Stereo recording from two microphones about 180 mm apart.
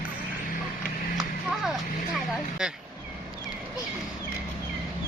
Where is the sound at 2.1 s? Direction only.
5° right (ahead or behind).